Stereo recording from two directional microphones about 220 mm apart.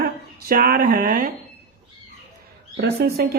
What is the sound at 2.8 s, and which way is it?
Speech, 45° right (ahead or behind).